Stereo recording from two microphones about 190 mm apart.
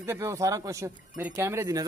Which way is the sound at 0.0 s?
15° right (ahead or behind).